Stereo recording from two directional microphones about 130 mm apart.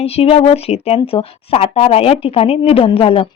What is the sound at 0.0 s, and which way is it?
A woman's voice, 50° left (ahead or behind).